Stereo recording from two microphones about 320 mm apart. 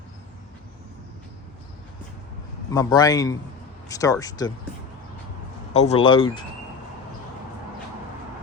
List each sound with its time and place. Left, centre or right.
2.7 s speech: centre
5.7 s speech: centre